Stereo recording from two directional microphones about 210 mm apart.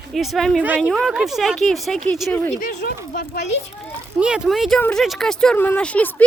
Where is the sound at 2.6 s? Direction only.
45° left (ahead or behind).